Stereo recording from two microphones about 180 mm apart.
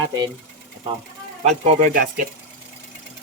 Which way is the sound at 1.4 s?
40° right (ahead or behind).